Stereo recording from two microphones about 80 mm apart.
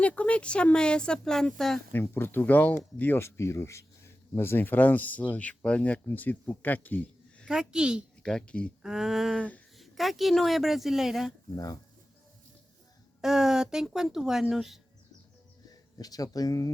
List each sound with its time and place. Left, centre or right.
0.0 s speech: centre
1.9 s speech: left
7.4 s speech: centre
8.2 s speech: centre
8.8 s speech: centre
11.5 s speech: left
13.2 s speech: centre
16.0 s speech: left